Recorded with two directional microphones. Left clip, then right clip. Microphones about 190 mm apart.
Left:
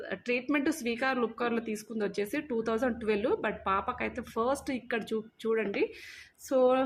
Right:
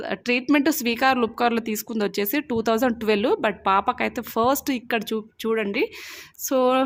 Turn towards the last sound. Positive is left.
turn(degrees=-55)  # may be behind; listen again after turning